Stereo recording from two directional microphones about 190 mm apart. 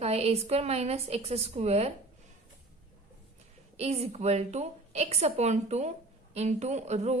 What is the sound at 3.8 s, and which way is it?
A woman's voice, 35° right (ahead or behind).